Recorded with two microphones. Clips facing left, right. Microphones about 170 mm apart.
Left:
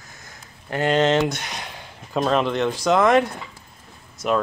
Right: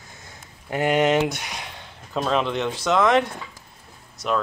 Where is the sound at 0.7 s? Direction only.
15° right (ahead or behind); by 3.2 s 5° left (ahead or behind).